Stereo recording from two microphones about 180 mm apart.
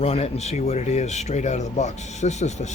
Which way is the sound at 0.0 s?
35° left (ahead or behind).